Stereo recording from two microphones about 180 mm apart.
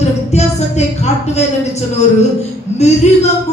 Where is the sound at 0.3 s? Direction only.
40° left (ahead or behind).